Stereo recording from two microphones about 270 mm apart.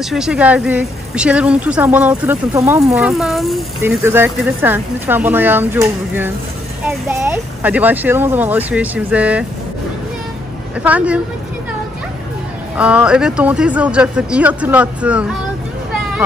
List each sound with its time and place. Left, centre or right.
0.1 s a woman's voice: centre
10.8 s a woman's voice: centre
12.7 s a woman's voice: centre